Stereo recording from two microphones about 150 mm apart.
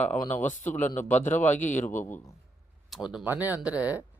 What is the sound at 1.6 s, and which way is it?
Speech, 55° left (ahead or behind).